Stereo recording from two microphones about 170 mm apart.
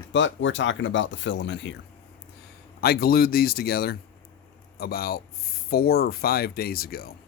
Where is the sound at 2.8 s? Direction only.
65° left (ahead or behind).